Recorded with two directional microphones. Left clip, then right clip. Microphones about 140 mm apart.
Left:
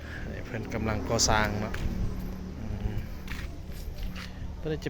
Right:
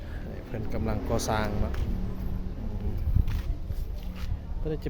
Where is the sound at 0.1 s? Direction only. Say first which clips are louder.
Left 2 dB; 10° right (ahead or behind).